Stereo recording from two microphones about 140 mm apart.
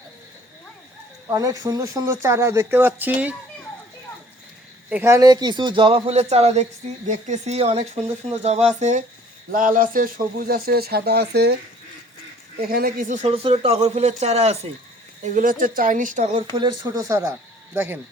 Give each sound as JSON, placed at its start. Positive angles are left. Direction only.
{"t": 1.3, "sound": "speech", "side_deg": -25}
{"t": 4.9, "sound": "a man's voice", "side_deg": -15}
{"t": 9.5, "sound": "speech", "side_deg": -70}
{"t": 12.5, "sound": "speech", "side_deg": -90}
{"t": 13.2, "sound": "speech", "side_deg": -45}
{"t": 15.2, "sound": "speech", "side_deg": -70}
{"t": 16.6, "sound": "speech", "side_deg": -30}